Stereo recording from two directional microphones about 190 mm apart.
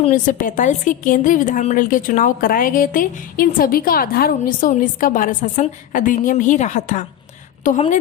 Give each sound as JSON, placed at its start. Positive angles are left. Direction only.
{"t": 0.0, "sound": "a woman's voice", "side_deg": 45}